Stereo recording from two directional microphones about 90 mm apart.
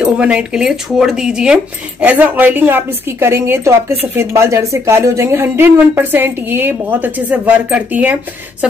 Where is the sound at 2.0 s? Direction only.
20° right (ahead or behind).